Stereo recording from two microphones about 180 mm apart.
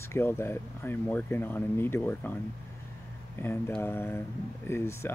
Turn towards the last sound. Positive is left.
turn(degrees=15)  # may be behind; listen again after turning